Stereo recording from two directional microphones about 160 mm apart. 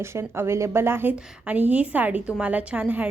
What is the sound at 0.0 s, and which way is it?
Speech, 15° right (ahead or behind).